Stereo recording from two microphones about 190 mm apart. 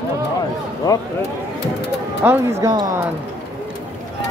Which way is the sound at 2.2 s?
10° right (ahead or behind).